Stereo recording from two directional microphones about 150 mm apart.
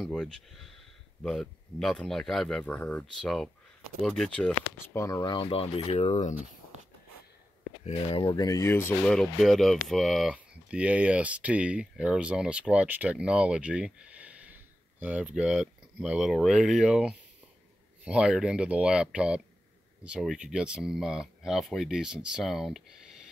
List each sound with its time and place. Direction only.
0.0 s speech: 5° left (ahead or behind)
4.9 s speech: 20° left (ahead or behind)
5.2 s speech: 35° left (ahead or behind)
7.8 s speech: 35° left (ahead or behind); by 9.1 s 15° left (ahead or behind)
9.1 s speech: centre (ahead or behind)